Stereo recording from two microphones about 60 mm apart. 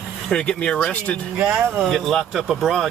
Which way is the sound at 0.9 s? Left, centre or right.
Left.